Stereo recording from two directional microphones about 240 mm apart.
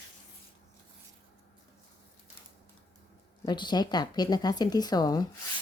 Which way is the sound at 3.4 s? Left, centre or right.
Centre.